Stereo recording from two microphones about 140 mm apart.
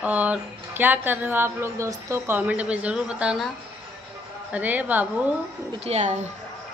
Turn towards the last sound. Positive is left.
turn(degrees=-55)  # may be behind; listen again after turning